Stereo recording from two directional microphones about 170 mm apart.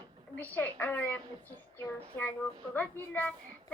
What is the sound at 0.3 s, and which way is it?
Speech, 10° left (ahead or behind).